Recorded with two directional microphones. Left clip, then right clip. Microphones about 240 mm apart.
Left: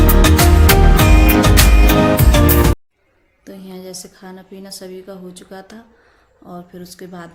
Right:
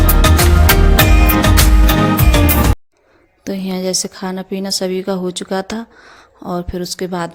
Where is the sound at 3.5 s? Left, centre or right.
Right.